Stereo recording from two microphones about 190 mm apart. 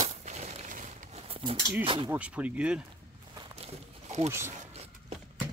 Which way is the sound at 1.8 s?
25° right (ahead or behind).